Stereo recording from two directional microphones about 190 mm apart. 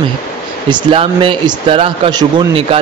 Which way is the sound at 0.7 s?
25° right (ahead or behind).